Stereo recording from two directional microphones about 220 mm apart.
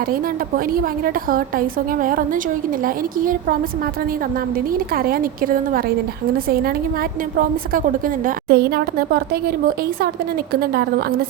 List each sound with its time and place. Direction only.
0.0 s a woman's voice: 40° right (ahead or behind)